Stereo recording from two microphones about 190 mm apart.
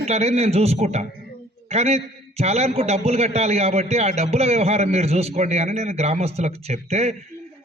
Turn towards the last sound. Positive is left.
turn(degrees=-35)  # may be behind; listen again after turning